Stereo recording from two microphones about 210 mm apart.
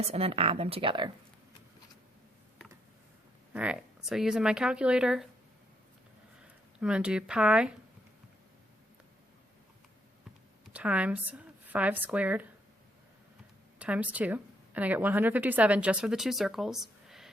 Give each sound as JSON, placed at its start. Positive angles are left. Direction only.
{"t": 0.0, "sound": "speech", "side_deg": -30}
{"t": 3.5, "sound": "speech", "side_deg": -5}
{"t": 6.7, "sound": "speech", "side_deg": -5}
{"t": 10.7, "sound": "speech", "side_deg": -5}
{"t": 13.7, "sound": "a woman's voice", "side_deg": -5}